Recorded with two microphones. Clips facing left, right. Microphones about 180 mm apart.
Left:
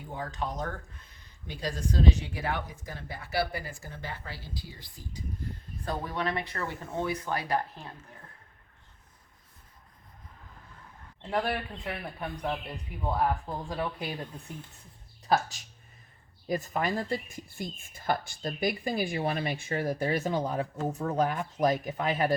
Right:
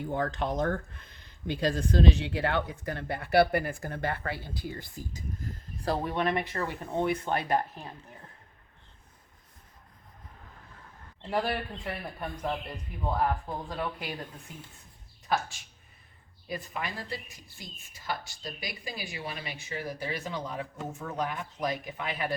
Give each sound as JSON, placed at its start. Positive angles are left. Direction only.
{"t": 0.1, "sound": "speech", "side_deg": -70}
{"t": 1.5, "sound": "a woman's voice", "side_deg": -60}
{"t": 5.8, "sound": "speech", "side_deg": -30}
{"t": 11.2, "sound": "speech", "side_deg": 0}
{"t": 15.3, "sound": "speech", "side_deg": 40}